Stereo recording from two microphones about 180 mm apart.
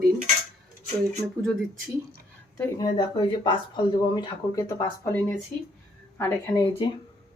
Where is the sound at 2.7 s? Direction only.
20° left (ahead or behind).